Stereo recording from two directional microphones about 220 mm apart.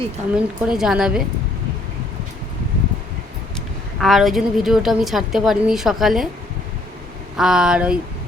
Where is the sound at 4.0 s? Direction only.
Centre (ahead or behind).